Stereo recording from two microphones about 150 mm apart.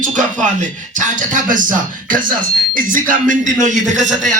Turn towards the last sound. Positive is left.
turn(degrees=-55)  # may be behind; listen again after turning